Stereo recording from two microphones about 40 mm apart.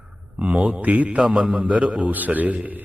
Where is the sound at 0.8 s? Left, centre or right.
Right.